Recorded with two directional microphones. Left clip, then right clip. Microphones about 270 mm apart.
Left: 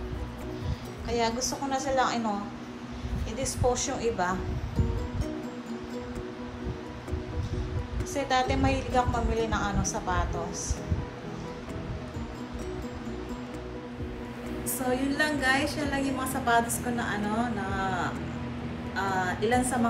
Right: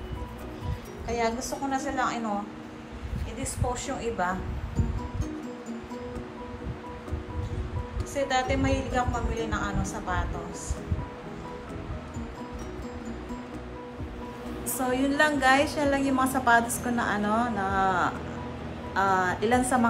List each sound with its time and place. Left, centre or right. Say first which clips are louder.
1.0 s a woman's voice: even; centre
3.7 s a woman's voice: left 2 dB; centre
8.1 s a woman's voice: even; centre
14.9 s a woman's voice: right 3 dB; centre